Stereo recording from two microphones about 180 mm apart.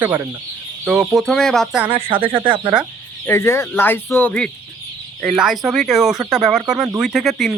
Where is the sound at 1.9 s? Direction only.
30° right (ahead or behind).